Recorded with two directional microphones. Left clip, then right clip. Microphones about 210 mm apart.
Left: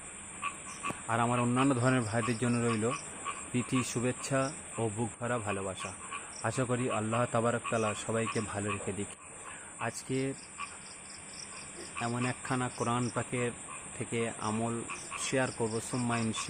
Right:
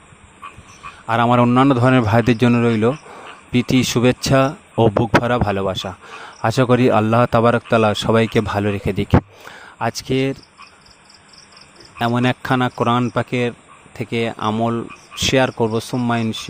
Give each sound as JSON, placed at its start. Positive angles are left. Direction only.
{"t": 1.0, "sound": "speech", "side_deg": -45}
{"t": 11.9, "sound": "speech", "side_deg": -45}